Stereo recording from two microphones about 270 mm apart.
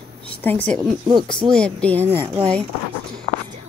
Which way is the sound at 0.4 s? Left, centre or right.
Centre.